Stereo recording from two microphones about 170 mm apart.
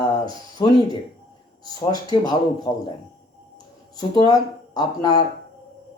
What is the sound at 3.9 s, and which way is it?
Speech, 25° left (ahead or behind).